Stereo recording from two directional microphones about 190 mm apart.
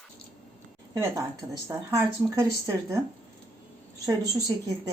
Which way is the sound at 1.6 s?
15° right (ahead or behind).